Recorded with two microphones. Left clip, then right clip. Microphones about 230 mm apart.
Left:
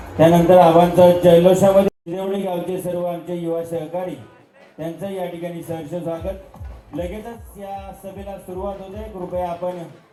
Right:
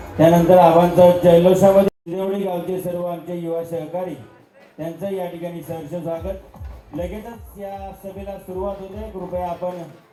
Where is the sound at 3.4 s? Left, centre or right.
Left.